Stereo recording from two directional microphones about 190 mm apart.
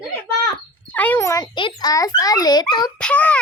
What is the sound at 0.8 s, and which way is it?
A child's voice, 10° left (ahead or behind).